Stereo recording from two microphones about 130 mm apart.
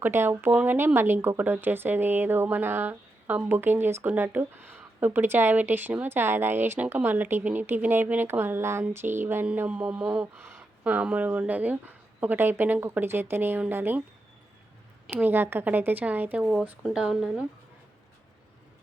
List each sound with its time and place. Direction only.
0.0 s speech: 15° right (ahead or behind)
15.1 s speech: 15° right (ahead or behind)